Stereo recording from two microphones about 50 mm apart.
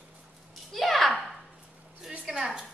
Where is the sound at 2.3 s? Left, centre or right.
Centre.